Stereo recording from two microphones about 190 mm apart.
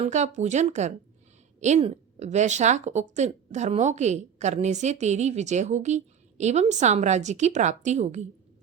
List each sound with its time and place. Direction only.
0.0 s speech: 40° right (ahead or behind)